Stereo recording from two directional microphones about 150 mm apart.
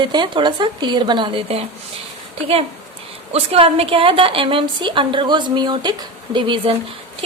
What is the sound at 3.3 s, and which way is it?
A woman's voice, 40° right (ahead or behind).